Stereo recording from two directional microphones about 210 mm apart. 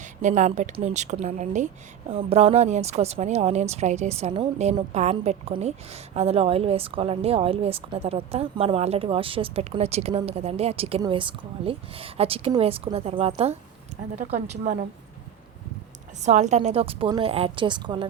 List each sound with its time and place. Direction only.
0.0 s a woman's voice: 35° right (ahead or behind)
16.2 s a woman's voice: 35° right (ahead or behind)